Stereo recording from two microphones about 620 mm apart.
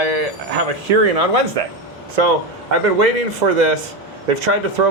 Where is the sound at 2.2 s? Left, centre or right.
Right.